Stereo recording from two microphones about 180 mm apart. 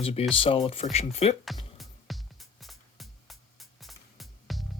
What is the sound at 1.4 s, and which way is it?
Music, centre (ahead or behind).